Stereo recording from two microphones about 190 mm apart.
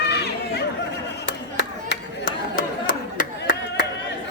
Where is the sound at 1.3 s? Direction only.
70° left (ahead or behind).